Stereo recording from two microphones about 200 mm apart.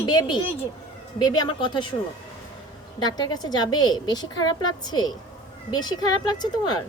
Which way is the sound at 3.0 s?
20° left (ahead or behind).